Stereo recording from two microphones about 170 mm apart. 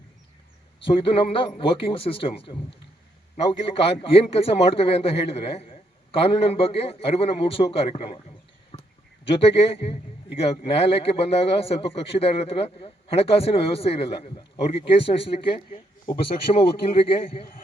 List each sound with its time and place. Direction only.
0.8 s a man's voice: 30° left (ahead or behind)
8.7 s a sound: 30° left (ahead or behind)
9.2 s a man's voice: 35° left (ahead or behind)